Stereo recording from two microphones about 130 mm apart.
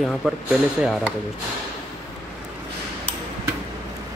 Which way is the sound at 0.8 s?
5° right (ahead or behind).